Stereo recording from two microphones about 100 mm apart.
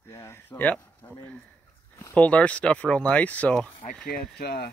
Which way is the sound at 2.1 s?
15° left (ahead or behind).